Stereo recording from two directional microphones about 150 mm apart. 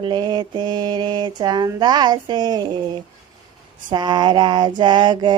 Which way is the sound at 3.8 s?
30° right (ahead or behind).